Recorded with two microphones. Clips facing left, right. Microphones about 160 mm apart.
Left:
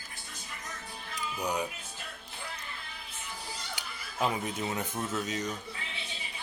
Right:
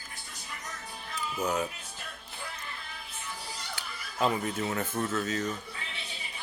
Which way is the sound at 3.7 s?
10° left (ahead or behind).